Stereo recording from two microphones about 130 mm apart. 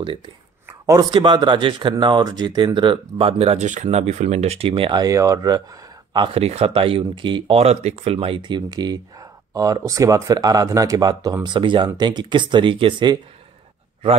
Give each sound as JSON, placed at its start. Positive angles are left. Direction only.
{"t": 0.7, "sound": "a sound", "side_deg": -25}
{"t": 1.1, "sound": "speech", "side_deg": -35}
{"t": 5.0, "sound": "speech", "side_deg": -25}
{"t": 8.4, "sound": "speech", "side_deg": -35}